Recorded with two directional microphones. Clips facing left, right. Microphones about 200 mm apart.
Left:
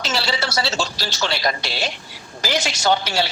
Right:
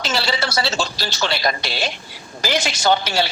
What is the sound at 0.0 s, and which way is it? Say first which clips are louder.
A man's voice: right 1 dB; 55° right (ahead or behind).